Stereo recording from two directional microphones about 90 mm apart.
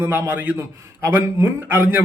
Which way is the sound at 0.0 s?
25° right (ahead or behind).